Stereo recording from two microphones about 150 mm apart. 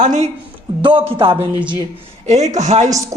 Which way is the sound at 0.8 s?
35° right (ahead or behind).